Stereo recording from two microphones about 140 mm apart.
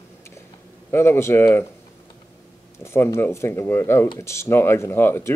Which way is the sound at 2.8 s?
15° left (ahead or behind).